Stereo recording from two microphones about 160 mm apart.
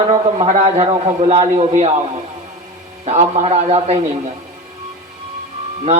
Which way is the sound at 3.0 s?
40° right (ahead or behind).